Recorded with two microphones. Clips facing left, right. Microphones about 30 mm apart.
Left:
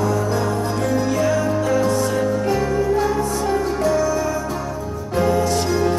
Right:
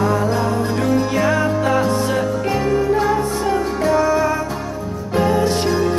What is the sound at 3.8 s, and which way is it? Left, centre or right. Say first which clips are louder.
Music: right 5 dB; right.